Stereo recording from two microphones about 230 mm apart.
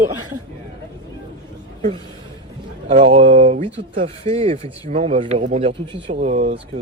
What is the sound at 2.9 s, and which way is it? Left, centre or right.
Speech, right.